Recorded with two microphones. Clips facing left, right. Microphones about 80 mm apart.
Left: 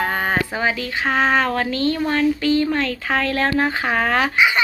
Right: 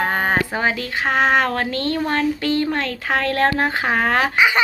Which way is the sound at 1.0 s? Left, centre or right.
Right.